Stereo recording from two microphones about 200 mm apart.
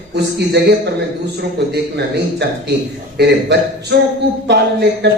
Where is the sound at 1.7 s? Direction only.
55° right (ahead or behind).